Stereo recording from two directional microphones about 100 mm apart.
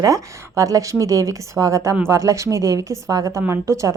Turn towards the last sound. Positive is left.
turn(degrees=-30)  # may be behind; listen again after turning